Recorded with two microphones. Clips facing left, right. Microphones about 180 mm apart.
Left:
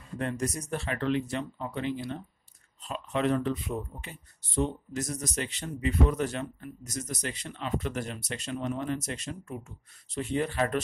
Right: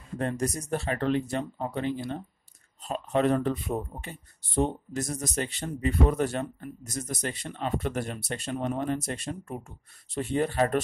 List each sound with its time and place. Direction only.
0.2 s speech: 35° right (ahead or behind); by 9.8 s 55° right (ahead or behind)
10.1 s speech: 45° right (ahead or behind)